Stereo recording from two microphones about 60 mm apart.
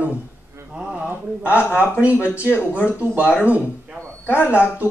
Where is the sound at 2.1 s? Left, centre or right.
Left.